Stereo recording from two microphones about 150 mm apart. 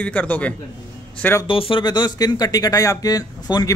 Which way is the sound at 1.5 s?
35° left (ahead or behind).